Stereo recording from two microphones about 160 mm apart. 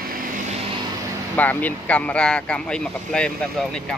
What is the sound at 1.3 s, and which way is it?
Speech, 10° left (ahead or behind).